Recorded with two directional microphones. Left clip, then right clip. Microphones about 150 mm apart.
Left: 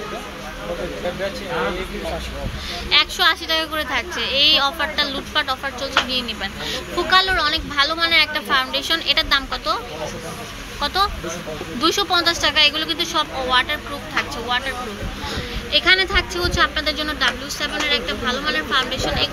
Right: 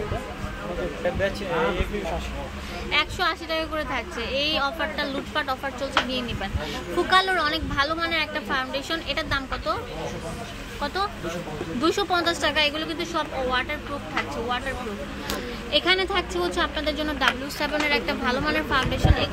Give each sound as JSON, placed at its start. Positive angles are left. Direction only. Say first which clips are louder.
{"t": 2.9, "sound": "a woman's voice", "louder": "left 7 dB", "side_deg": -10}
{"t": 11.8, "sound": "a woman's voice", "louder": "left 5 dB", "side_deg": -15}
{"t": 15.7, "sound": "speech", "louder": "left 6 dB", "side_deg": -20}
{"t": 17.6, "sound": "speech", "louder": "left 3 dB", "side_deg": -45}